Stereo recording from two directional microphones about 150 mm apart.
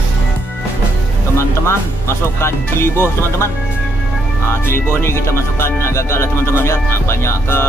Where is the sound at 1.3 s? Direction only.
20° left (ahead or behind).